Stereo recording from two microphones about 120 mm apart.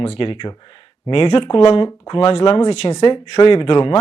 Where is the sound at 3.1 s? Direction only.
50° left (ahead or behind).